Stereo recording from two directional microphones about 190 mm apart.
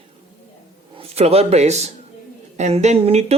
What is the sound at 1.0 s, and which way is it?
A man's voice, 35° right (ahead or behind).